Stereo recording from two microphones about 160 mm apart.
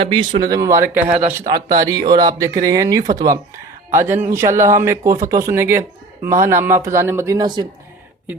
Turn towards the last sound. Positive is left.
turn(degrees=-25)  # may be behind; listen again after turning